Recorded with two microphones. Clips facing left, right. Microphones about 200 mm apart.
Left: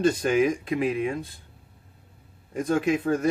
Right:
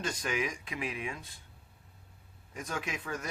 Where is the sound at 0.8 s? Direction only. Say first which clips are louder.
Left 10 dB; 35° left (ahead or behind).